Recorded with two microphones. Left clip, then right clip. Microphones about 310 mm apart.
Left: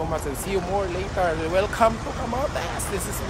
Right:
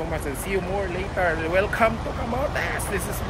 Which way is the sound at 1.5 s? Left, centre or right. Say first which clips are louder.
Even; centre.